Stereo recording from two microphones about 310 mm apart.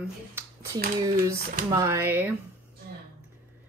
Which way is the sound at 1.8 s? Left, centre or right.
Centre.